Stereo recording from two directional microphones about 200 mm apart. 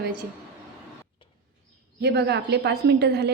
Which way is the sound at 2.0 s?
55° right (ahead or behind).